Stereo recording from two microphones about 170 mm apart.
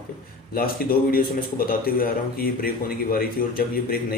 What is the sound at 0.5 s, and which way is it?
Speech, 60° left (ahead or behind).